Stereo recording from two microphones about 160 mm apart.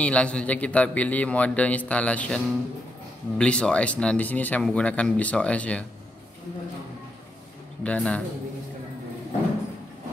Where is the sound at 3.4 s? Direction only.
5° left (ahead or behind).